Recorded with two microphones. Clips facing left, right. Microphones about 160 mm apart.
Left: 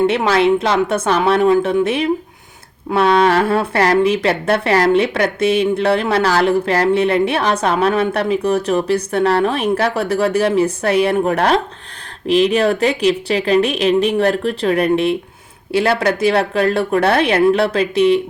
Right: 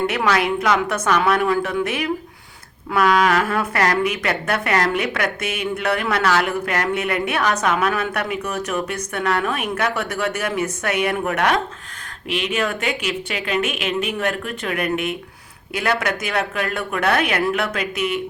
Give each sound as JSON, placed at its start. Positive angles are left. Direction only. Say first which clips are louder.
{"t": 0.1, "sound": "speech", "louder": "left 6 dB", "side_deg": 25}